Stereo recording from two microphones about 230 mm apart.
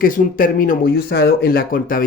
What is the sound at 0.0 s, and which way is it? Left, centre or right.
Speech, left.